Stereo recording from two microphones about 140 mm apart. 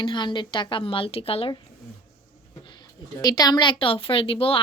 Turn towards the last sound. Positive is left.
turn(degrees=40)  # may be behind; listen again after turning